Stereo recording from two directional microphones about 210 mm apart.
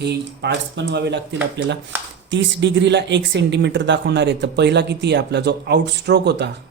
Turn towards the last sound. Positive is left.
turn(degrees=-55)  # may be behind; listen again after turning